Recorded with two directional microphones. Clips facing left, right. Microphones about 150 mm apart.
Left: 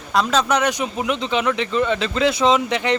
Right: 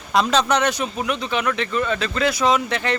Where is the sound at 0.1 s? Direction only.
Centre (ahead or behind).